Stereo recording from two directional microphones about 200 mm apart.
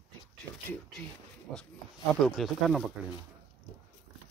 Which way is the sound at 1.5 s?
5° left (ahead or behind).